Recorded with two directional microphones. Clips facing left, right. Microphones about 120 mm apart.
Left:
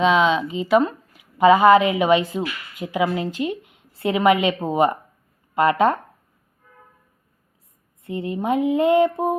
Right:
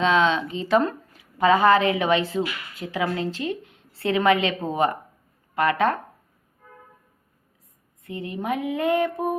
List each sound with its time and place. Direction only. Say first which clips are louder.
0.0 s speech: left 3 dB; 15° left (ahead or behind)
8.0 s speech: left 5 dB; 25° left (ahead or behind)